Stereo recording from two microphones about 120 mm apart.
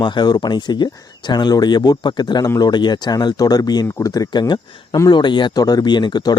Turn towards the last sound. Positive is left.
turn(degrees=40)  # may be behind; listen again after turning